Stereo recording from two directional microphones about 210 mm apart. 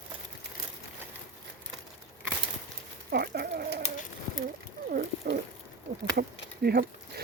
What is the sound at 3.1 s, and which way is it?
Chicken, 50° right (ahead or behind).